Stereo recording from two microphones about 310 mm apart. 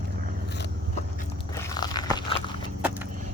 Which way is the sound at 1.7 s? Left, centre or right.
Centre.